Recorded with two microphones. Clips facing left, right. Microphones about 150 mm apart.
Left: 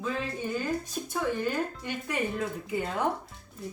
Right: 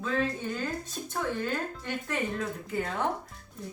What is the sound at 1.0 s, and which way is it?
Speech, 10° left (ahead or behind).